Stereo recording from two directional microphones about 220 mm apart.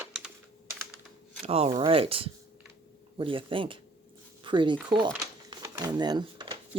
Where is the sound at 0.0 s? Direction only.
5° right (ahead or behind).